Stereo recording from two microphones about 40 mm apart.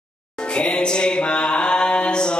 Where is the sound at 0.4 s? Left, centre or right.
Left.